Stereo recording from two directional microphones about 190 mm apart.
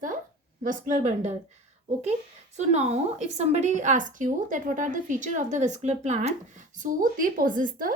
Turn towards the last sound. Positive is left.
turn(degrees=-45)  # may be behind; listen again after turning